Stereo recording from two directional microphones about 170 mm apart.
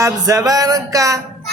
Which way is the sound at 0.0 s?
20° right (ahead or behind).